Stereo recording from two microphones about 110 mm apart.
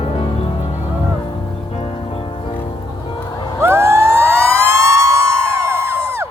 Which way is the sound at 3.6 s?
25° right (ahead or behind).